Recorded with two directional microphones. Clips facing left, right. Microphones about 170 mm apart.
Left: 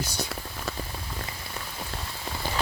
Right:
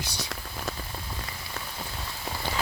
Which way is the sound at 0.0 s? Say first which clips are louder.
Left 4 dB; 50° left (ahead or behind).